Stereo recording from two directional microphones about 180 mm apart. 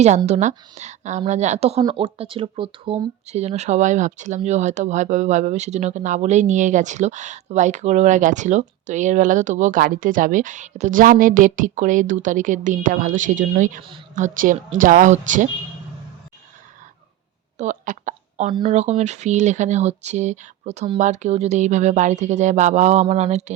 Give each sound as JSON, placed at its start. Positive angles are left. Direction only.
{"t": 0.3, "sound": "speech", "side_deg": -40}
{"t": 17.6, "sound": "a sound", "side_deg": -45}
{"t": 18.7, "sound": "speech", "side_deg": -40}